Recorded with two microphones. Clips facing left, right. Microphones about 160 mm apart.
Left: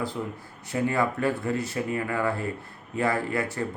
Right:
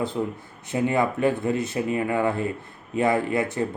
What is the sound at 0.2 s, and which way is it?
Speech, 20° right (ahead or behind).